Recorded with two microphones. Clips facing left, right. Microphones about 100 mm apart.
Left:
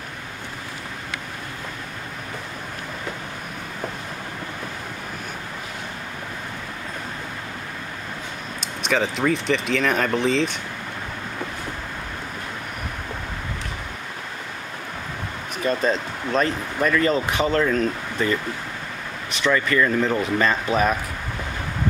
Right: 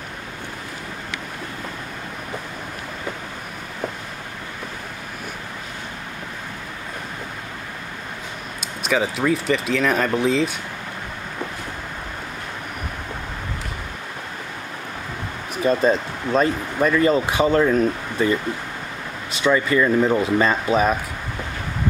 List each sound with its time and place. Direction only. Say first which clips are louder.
8.8 s speech: right 1 dB; 5° right (ahead or behind)
15.6 s speech: right 4 dB; 25° right (ahead or behind)
15.9 s speech: right 3 dB; 10° right (ahead or behind)
19.4 s speech: right 2 dB; 15° right (ahead or behind)